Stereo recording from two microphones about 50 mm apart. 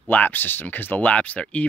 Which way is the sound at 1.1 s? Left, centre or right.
Left.